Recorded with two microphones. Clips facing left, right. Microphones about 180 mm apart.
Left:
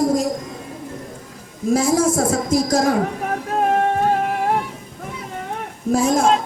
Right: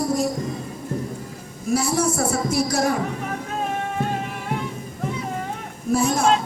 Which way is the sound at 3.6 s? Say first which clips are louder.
Left 9 dB; 60° left (ahead or behind).